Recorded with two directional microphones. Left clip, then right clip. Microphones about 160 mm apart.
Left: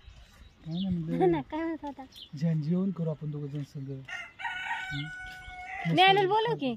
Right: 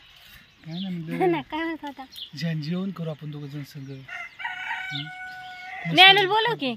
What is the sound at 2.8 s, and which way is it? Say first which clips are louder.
Speech: right 1 dB; 5° right (ahead or behind).